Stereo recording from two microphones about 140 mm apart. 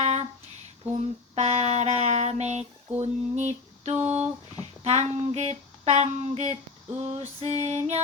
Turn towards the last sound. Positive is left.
turn(degrees=-50)  # may be behind; listen again after turning